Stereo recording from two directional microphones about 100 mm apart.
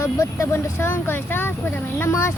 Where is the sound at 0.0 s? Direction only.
30° left (ahead or behind).